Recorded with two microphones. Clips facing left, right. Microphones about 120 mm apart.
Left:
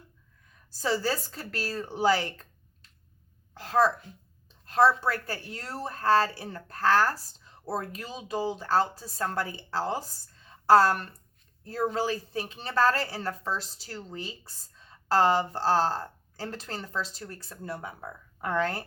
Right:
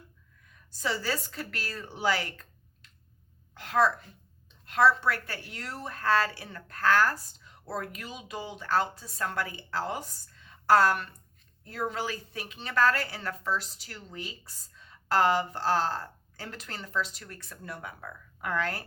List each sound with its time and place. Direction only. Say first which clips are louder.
0.4 s a woman's voice: left 3 dB; 30° left (ahead or behind)
3.5 s a woman's voice: left 1 dB; 35° left (ahead or behind)